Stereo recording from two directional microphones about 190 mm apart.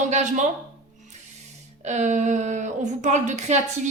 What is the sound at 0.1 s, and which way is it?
Speech, 40° right (ahead or behind).